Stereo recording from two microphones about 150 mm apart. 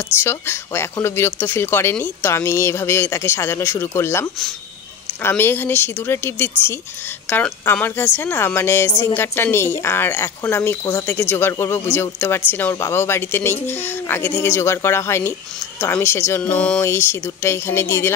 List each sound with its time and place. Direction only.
0.2 s speech: 15° left (ahead or behind)